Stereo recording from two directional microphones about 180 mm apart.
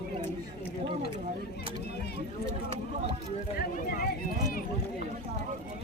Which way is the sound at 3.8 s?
55° left (ahead or behind).